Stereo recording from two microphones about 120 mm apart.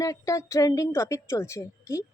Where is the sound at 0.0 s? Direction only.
25° left (ahead or behind).